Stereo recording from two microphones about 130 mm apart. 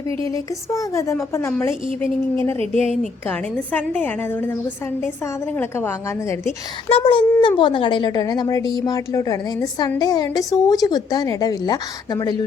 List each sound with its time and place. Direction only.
0.3 s a woman's voice: 25° left (ahead or behind)
5.5 s speech: 20° left (ahead or behind)
6.8 s a woman's voice: 40° left (ahead or behind)